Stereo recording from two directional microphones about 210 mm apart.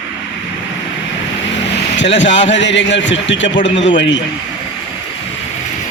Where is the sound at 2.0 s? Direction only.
60° left (ahead or behind).